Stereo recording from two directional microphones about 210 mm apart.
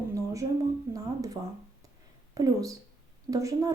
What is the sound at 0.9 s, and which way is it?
Speech, 15° right (ahead or behind).